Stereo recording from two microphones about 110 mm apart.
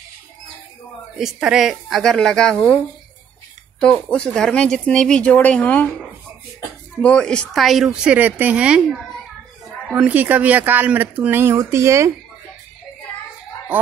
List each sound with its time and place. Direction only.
1.1 s speech: 5° right (ahead or behind)
3.8 s speech: 10° left (ahead or behind); by 8.8 s 10° right (ahead or behind)
10.0 s speech: 15° right (ahead or behind)